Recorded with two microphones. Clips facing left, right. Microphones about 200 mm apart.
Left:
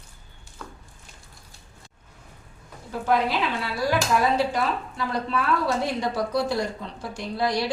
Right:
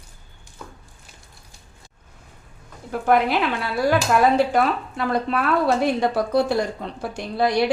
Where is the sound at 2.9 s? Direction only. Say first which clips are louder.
Right 4 dB; 55° right (ahead or behind).